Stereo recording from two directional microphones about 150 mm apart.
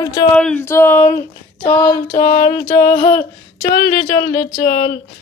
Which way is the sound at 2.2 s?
65° left (ahead or behind).